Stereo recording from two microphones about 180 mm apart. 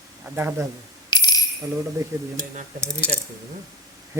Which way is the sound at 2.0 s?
20° right (ahead or behind).